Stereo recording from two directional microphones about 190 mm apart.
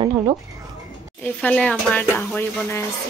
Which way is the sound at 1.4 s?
5° left (ahead or behind).